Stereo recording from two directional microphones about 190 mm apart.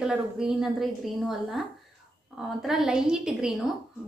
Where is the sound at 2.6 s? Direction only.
Centre (ahead or behind).